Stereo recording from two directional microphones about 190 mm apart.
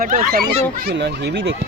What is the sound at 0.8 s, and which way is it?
Speech, 60° right (ahead or behind).